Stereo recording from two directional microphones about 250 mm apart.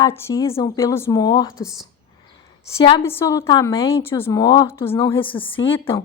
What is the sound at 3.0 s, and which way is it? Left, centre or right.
A woman's voice, centre.